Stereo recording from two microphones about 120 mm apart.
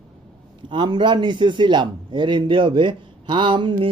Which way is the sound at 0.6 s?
40° right (ahead or behind).